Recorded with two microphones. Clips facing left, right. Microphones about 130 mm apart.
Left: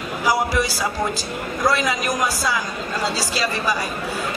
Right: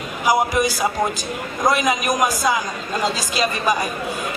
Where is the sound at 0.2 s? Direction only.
20° right (ahead or behind).